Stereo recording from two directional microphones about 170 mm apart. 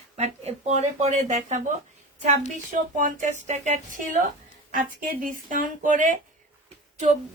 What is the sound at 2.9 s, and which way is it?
Speech, 50° right (ahead or behind).